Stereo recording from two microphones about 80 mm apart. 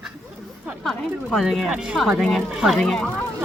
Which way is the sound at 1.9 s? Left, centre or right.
Centre.